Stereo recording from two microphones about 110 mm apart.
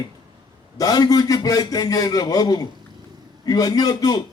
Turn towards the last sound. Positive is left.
turn(degrees=40)  # may be behind; listen again after turning